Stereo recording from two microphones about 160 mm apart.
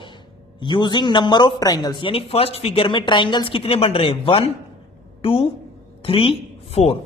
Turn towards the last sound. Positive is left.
turn(degrees=40)  # may be behind; listen again after turning